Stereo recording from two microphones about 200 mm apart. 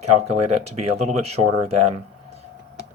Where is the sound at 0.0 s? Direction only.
30° right (ahead or behind).